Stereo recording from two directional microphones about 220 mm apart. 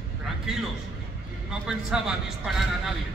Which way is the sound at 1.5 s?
5° right (ahead or behind).